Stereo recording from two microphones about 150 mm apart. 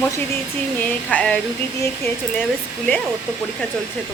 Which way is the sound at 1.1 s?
10° left (ahead or behind).